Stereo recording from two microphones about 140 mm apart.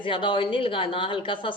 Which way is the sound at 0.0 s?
35° left (ahead or behind).